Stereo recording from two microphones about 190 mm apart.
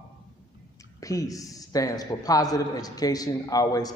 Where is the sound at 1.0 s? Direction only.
20° left (ahead or behind).